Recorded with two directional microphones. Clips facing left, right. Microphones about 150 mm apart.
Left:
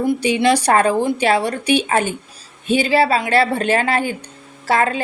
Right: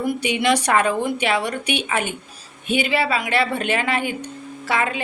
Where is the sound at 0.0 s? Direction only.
30° left (ahead or behind).